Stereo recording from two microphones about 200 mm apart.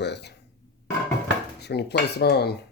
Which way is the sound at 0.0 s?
55° left (ahead or behind).